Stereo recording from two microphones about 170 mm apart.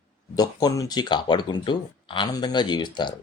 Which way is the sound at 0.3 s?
25° left (ahead or behind).